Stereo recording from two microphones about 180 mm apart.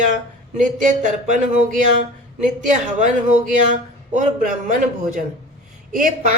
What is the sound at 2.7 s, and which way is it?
A woman's voice, 40° right (ahead or behind).